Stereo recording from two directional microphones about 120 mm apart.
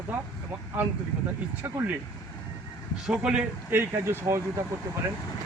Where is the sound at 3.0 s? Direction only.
10° right (ahead or behind); by 4.4 s 25° right (ahead or behind).